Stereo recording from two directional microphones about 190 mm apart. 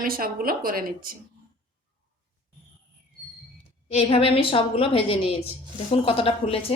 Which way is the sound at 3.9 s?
30° left (ahead or behind).